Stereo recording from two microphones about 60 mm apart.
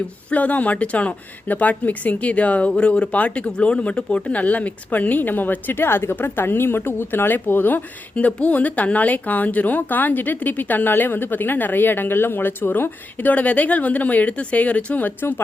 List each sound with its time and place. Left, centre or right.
0.3 s speech: left